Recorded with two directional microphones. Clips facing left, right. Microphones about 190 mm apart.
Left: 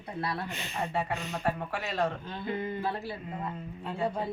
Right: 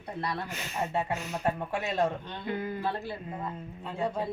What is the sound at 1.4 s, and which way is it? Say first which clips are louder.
Speech: right 2 dB; 20° right (ahead or behind).